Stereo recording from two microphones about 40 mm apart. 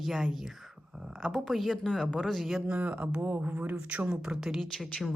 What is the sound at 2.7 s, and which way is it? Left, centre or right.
Speech, right.